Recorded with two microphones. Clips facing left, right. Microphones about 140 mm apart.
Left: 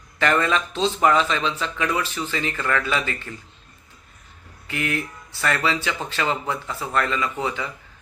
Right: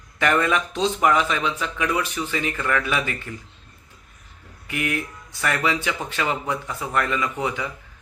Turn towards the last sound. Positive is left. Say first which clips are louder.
# even
turn(degrees=-15)  # may be behind; listen again after turning